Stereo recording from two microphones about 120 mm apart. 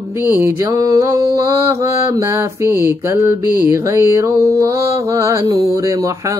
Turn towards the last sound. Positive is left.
turn(degrees=-25)  # may be behind; listen again after turning